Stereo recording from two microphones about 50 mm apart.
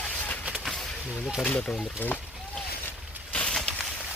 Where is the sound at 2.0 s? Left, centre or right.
Left.